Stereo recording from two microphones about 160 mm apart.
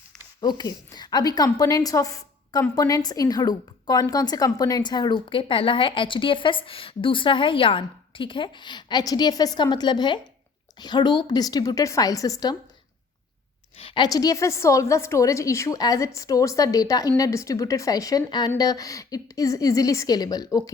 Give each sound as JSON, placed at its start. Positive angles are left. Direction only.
{"t": 0.4, "sound": "a woman's voice", "side_deg": 25}
{"t": 13.7, "sound": "a woman's voice", "side_deg": 35}